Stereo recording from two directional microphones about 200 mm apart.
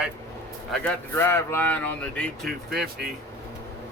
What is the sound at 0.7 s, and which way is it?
Speech, 10° left (ahead or behind).